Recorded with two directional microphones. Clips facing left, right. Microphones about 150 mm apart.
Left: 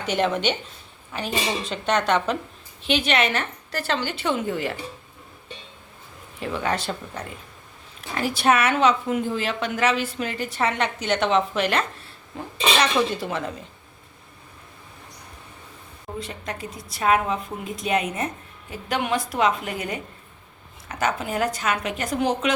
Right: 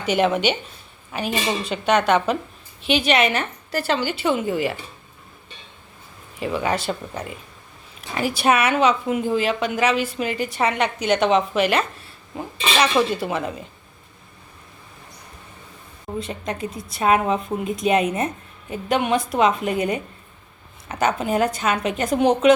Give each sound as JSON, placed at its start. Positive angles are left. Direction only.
{"t": 0.0, "sound": "a woman's voice", "side_deg": -10}
{"t": 6.4, "sound": "a woman's voice", "side_deg": -10}
{"t": 16.2, "sound": "a woman's voice", "side_deg": -20}